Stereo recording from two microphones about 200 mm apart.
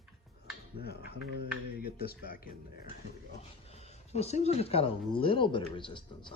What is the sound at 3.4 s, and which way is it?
Speech, 30° left (ahead or behind).